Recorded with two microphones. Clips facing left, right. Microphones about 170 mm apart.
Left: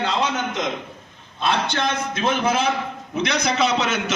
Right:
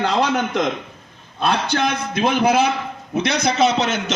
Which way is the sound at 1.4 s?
45° right (ahead or behind).